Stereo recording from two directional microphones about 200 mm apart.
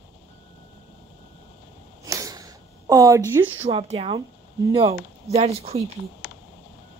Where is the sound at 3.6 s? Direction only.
30° right (ahead or behind).